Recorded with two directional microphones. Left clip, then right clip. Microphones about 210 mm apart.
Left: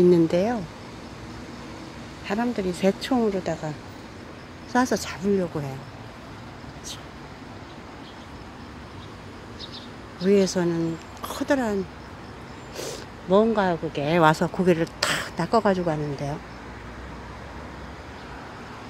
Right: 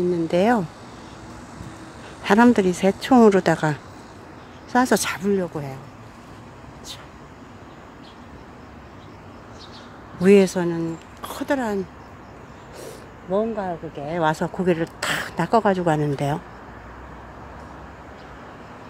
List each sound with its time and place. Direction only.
0.3 s speech: 10° right (ahead or behind)
2.2 s speech: 20° right (ahead or behind)
2.8 s speech: 5° right (ahead or behind)
3.2 s speech: 25° right (ahead or behind)
4.7 s speech: 15° right (ahead or behind)
10.2 s speech: 15° right (ahead or behind)
13.3 s speech: 15° left (ahead or behind)
14.2 s a woman's voice: centre (ahead or behind); by 16.3 s 15° right (ahead or behind)